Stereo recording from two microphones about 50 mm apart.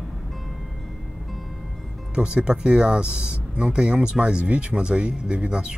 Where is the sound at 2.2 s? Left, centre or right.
Centre.